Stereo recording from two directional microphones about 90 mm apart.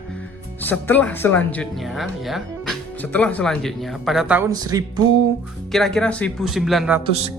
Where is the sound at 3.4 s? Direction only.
5° left (ahead or behind).